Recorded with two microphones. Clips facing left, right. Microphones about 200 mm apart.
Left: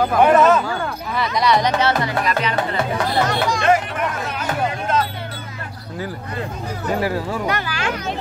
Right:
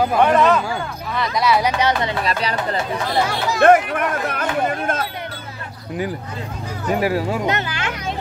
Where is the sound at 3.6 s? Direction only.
55° right (ahead or behind).